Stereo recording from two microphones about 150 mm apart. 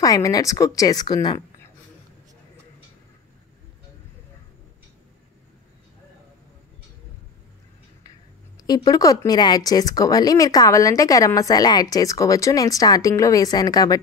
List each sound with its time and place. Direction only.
0.0 s speech: 25° left (ahead or behind)
8.6 s speech: 25° left (ahead or behind)